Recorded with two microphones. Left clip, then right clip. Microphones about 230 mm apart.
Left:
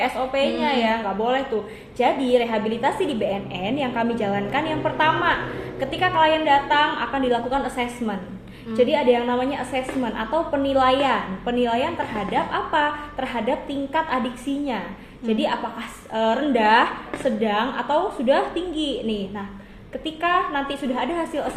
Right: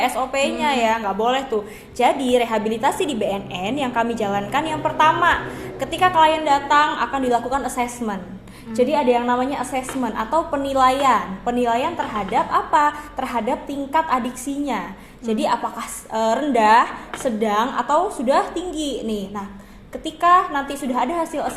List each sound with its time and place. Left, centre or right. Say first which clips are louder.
0.0 s a woman's voice: right 2 dB; right
15.3 s a woman's voice: right 3 dB; right
20.2 s a woman's voice: right 6 dB; right